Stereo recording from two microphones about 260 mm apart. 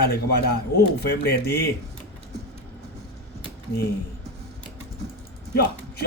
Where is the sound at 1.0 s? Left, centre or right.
Left.